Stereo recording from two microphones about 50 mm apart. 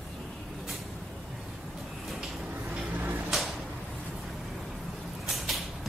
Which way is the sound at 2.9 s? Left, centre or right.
Right.